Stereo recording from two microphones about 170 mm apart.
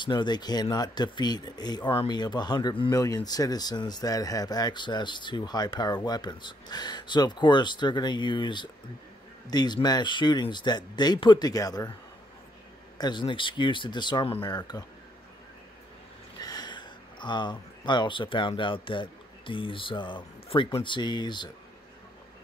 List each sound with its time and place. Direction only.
0.0 s speech: 25° left (ahead or behind)
12.9 s speech: 25° left (ahead or behind)
16.3 s speech: 25° left (ahead or behind)